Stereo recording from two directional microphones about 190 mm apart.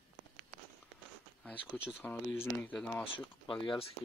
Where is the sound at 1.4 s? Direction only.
10° left (ahead or behind).